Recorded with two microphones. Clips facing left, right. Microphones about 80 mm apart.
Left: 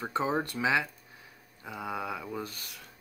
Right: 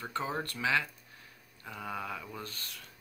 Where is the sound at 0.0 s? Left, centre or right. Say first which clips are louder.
Left 5 dB; centre.